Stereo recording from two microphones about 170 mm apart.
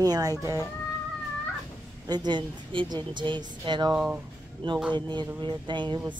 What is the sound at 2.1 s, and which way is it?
Speech, 25° right (ahead or behind).